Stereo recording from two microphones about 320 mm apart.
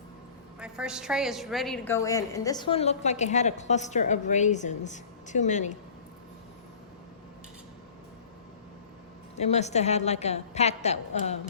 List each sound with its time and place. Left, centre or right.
0.6 s a woman's voice: centre; by 5.7 s left
9.3 s a woman's voice: left